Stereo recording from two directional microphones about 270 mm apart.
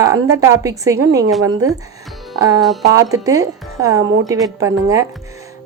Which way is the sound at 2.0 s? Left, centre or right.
Centre.